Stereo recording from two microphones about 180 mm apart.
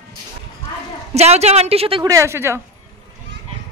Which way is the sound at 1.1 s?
35° right (ahead or behind).